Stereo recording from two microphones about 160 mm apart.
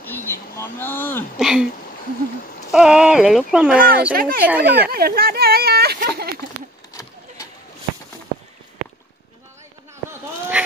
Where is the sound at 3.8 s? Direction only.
65° right (ahead or behind); by 6.3 s 80° right.